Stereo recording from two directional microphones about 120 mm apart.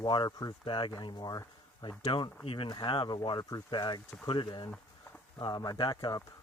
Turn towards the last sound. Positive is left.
turn(degrees=35)  # may be behind; listen again after turning